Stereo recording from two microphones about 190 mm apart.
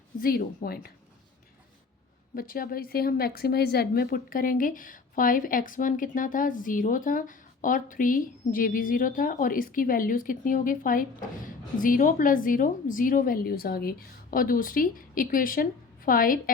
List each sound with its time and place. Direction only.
0.2 s a woman's voice: 50° left (ahead or behind)
2.3 s a woman's voice: 50° left (ahead or behind)